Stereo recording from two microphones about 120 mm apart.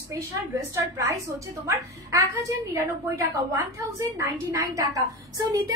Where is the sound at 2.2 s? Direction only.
25° right (ahead or behind).